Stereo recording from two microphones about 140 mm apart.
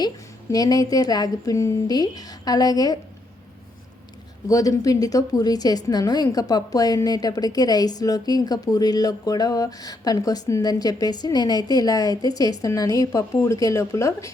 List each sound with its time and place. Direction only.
0.5 s a woman's voice: 25° left (ahead or behind)
4.4 s a woman's voice: 25° left (ahead or behind)